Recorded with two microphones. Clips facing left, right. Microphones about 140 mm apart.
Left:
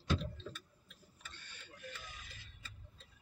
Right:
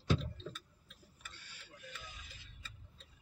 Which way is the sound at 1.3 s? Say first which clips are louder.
Left 1 dB; 10° right (ahead or behind).